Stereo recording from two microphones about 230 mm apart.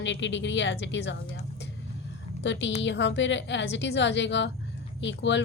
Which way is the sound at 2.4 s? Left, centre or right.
Left.